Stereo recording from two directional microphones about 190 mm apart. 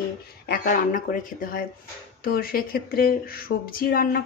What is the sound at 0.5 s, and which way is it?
Speech, 45° left (ahead or behind).